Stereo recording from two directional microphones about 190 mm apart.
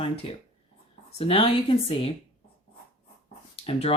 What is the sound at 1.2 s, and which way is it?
Speech, 30° left (ahead or behind).